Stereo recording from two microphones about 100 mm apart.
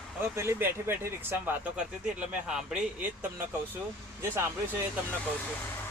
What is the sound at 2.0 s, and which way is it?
Speech, 5° right (ahead or behind).